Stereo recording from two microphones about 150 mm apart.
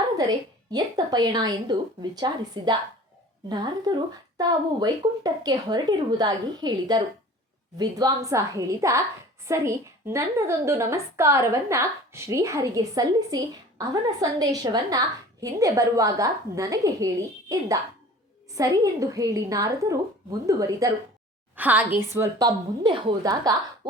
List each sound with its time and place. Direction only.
0.2 s a woman's voice: 25° right (ahead or behind)
21.5 s a woman's voice: 10° right (ahead or behind)